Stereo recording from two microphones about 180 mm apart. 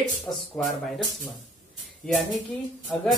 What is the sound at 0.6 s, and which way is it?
Speech, 5° left (ahead or behind).